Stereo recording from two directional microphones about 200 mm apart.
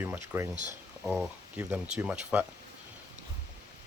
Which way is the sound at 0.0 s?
10° right (ahead or behind).